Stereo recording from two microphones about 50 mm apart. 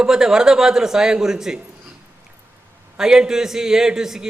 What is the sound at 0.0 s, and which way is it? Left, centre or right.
A man's voice, centre.